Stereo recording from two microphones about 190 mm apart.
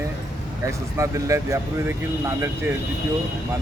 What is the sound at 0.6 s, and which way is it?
Speech, 15° right (ahead or behind).